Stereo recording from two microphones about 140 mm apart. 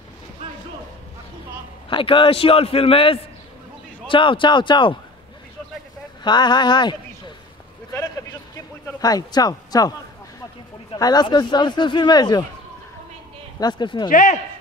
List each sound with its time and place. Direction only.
1.9 s a man's voice: 35° left (ahead or behind)
6.2 s speech: 30° left (ahead or behind)
7.9 s a sound: 25° left (ahead or behind)
9.0 s speech: 25° left (ahead or behind)
11.0 s a man's voice: 30° left (ahead or behind)
13.6 s a man's voice: 30° left (ahead or behind)
14.0 s a man's voice: 75° left (ahead or behind)